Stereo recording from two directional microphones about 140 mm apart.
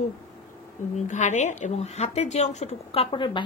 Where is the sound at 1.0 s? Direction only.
60° left (ahead or behind).